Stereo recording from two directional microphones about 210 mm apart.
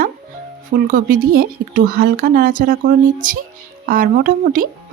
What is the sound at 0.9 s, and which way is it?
A woman's voice, 40° right (ahead or behind).